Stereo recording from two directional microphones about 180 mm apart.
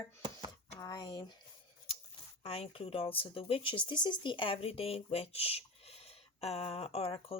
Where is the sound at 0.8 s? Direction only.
25° left (ahead or behind).